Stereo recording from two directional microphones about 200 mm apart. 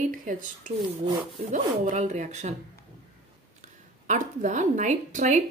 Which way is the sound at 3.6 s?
40° right (ahead or behind).